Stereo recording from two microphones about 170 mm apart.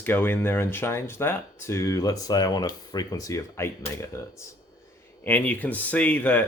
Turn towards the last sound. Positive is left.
turn(degrees=10)  # may be behind; listen again after turning